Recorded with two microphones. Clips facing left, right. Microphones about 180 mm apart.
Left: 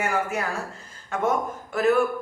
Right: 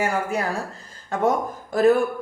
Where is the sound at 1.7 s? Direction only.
35° right (ahead or behind).